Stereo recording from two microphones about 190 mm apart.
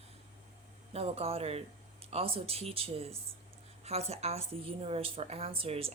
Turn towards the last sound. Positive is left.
turn(degrees=-30)  # may be behind; listen again after turning